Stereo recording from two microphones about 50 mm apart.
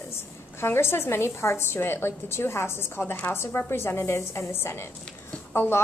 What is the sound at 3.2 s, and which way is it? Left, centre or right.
A woman's voice, left.